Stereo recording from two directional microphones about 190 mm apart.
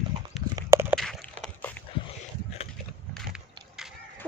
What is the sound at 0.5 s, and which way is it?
Clip-clop, 15° right (ahead or behind).